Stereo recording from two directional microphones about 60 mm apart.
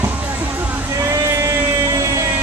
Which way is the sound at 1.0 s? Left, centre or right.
Right.